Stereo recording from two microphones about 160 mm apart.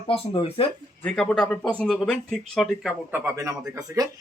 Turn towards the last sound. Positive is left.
turn(degrees=-20)  # may be behind; listen again after turning